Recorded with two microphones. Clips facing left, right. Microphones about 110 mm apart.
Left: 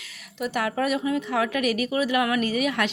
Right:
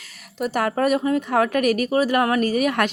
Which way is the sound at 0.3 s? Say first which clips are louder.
Right 4 dB; 45° right (ahead or behind).